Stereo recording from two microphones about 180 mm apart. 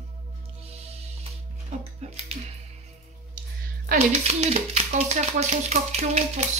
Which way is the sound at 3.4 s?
50° right (ahead or behind).